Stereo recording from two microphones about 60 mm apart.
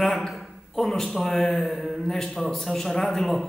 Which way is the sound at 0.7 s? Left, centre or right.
Centre.